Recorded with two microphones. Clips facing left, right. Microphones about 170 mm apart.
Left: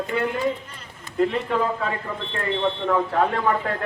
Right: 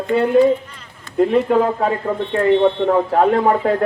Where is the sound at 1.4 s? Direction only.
40° right (ahead or behind).